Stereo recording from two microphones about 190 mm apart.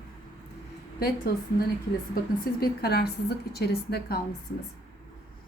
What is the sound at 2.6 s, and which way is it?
A woman's voice, 55° left (ahead or behind).